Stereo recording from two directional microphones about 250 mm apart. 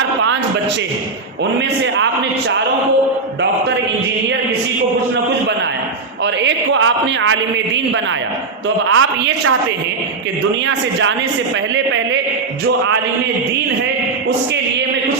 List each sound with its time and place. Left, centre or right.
6.2 s a man's voice: right
8.9 s a woman's voice: right